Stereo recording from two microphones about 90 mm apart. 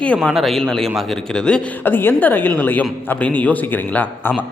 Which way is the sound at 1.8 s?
25° left (ahead or behind).